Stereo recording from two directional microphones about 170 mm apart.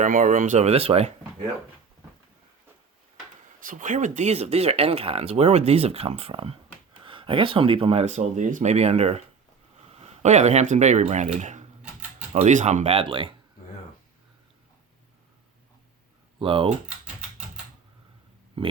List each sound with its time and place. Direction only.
0.0 s speech: 50° right (ahead or behind)
3.6 s speech: 50° right (ahead or behind); by 13.3 s 30° right (ahead or behind)
16.4 s speech: 30° right (ahead or behind)